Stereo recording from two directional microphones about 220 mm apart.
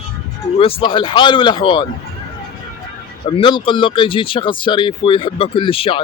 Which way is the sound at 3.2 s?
25° left (ahead or behind).